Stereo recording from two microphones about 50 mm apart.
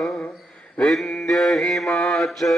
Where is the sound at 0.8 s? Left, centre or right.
Centre.